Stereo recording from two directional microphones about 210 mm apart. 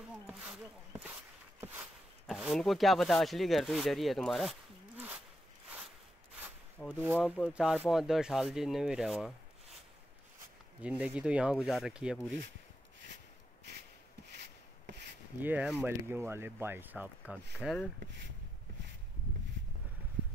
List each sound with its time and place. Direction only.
0.3 s speech: 5° right (ahead or behind)
1.6 s a sound: 10° right (ahead or behind)
2.2 s speech: centre (ahead or behind)
6.9 s speech: 10° right (ahead or behind)
10.8 s speech: 5° right (ahead or behind)
14.3 s a sound: 55° right (ahead or behind)
15.4 s speech: 10° right (ahead or behind)